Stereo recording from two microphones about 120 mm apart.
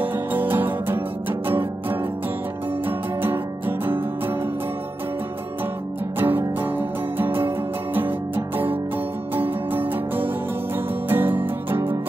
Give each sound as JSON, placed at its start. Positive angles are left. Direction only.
{"t": 0.0, "sound": "music", "side_deg": -15}
{"t": 3.2, "sound": "music", "side_deg": -15}
{"t": 6.1, "sound": "music", "side_deg": -15}